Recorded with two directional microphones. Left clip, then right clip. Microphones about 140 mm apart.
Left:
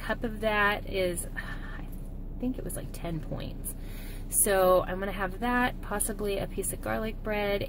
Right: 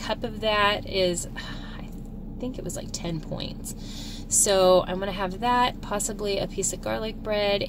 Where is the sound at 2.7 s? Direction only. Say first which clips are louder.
Right 5 dB; 15° right (ahead or behind).